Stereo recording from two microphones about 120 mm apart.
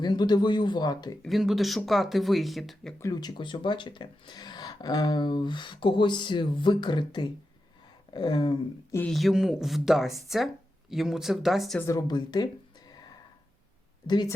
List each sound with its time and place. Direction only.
0.0 s speech: 35° left (ahead or behind)
1.2 s speech: centre (ahead or behind)
3.0 s speech: 30° left (ahead or behind)
9.0 s speech: centre (ahead or behind)
11.9 s speech: 35° left (ahead or behind)